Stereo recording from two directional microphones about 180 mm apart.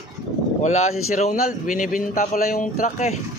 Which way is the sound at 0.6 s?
40° left (ahead or behind).